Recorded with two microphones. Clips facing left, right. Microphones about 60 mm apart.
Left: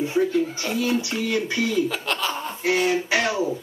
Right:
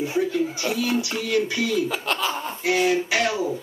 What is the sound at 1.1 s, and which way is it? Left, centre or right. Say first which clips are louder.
Speech: right 1 dB; centre.